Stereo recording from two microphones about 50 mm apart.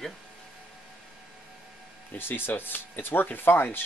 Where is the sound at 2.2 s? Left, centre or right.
Left.